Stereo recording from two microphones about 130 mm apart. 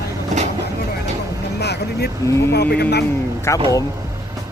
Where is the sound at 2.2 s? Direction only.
25° left (ahead or behind).